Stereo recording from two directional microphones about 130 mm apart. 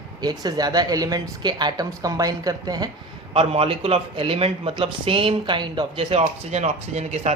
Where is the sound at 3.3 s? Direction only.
45° right (ahead or behind).